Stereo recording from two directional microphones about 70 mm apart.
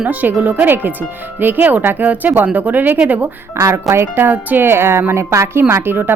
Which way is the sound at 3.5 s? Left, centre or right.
Right.